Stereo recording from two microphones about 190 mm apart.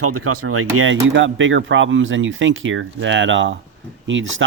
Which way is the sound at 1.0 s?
75° right (ahead or behind).